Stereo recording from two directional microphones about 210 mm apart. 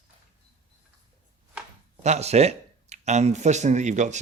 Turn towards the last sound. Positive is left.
turn(degrees=-35)  # may be behind; listen again after turning